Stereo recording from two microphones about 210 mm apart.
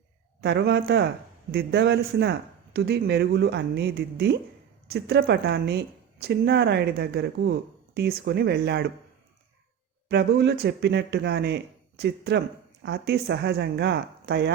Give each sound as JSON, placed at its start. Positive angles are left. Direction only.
{"t": 0.4, "sound": "speech", "side_deg": -55}
{"t": 10.1, "sound": "speech", "side_deg": -50}